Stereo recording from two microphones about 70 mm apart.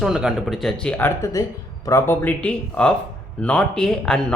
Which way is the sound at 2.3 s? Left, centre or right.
Centre.